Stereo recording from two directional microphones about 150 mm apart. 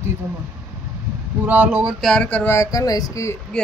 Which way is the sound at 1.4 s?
10° right (ahead or behind).